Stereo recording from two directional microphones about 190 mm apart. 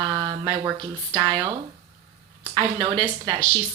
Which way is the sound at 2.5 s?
25° right (ahead or behind).